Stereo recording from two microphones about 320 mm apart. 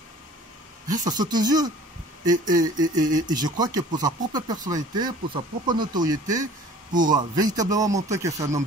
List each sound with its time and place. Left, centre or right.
1.1 s speech: centre
2.2 s speech: right
2.5 s speech: centre